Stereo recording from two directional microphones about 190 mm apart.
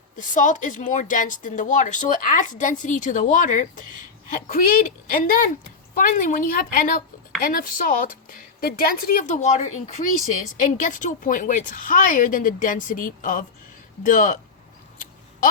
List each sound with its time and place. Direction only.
0.2 s a woman's voice: 40° left (ahead or behind)